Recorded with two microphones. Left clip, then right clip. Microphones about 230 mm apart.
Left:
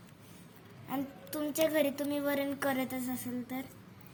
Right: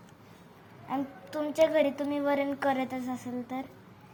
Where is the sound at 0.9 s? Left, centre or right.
Left.